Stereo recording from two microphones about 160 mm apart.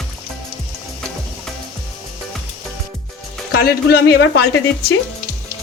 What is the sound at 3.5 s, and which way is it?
A woman's voice, 85° left.